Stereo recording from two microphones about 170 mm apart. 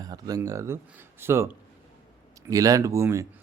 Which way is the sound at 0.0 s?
20° right (ahead or behind).